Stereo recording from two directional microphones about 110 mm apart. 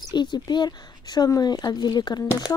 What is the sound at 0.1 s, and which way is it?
Speech, 45° left (ahead or behind).